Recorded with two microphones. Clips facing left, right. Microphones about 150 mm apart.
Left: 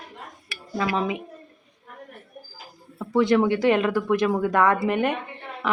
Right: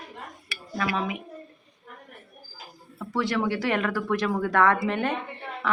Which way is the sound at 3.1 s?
20° left (ahead or behind).